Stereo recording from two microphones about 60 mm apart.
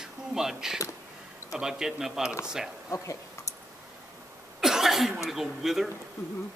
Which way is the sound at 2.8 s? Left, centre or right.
Left.